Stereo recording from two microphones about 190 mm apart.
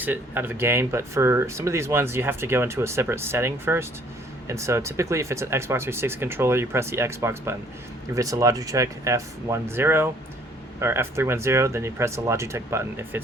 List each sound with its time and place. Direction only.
0.0 s speech: 10° right (ahead or behind)